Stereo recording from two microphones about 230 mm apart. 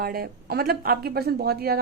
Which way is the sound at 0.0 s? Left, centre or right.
Right.